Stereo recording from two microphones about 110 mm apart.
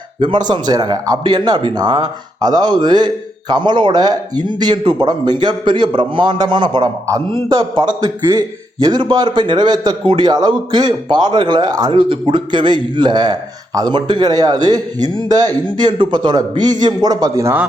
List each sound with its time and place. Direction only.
0.2 s a man's voice: 45° right (ahead or behind)